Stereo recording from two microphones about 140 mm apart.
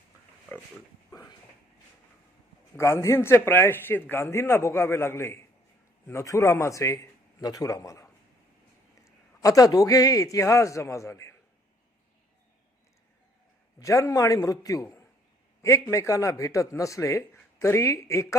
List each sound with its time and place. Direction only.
2.7 s a man's voice: 20° left (ahead or behind)
13.7 s a man's voice: 20° left (ahead or behind)